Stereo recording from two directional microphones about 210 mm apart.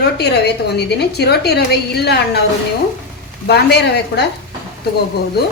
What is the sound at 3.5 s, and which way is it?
Speech, 50° left (ahead or behind).